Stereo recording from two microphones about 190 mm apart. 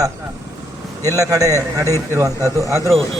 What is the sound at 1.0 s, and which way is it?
A man's voice, 15° right (ahead or behind).